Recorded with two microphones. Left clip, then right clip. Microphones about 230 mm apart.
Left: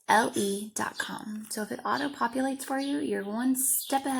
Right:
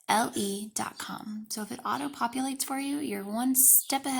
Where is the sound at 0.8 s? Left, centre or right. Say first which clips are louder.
Left 3 dB; right.